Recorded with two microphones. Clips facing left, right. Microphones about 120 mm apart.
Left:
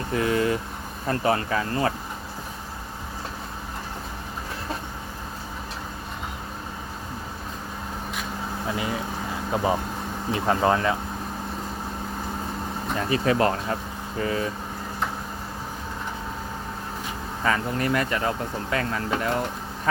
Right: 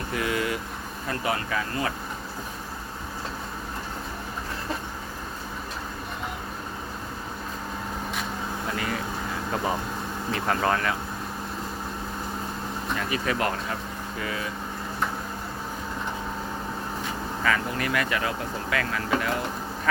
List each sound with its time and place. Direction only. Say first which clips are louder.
0.1 s speech: left 5 dB; 30° left (ahead or behind)
8.7 s speech: left 2 dB; 20° left (ahead or behind)
10.3 s speech: left 4 dB; 20° left (ahead or behind)
13.0 s speech: left 6 dB; 30° left (ahead or behind)
17.4 s speech: left 2 dB; 30° left (ahead or behind)